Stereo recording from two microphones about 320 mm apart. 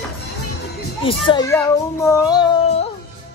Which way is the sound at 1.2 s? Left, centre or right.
Centre.